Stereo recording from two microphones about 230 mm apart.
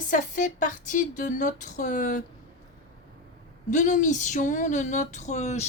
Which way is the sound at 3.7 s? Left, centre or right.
Left.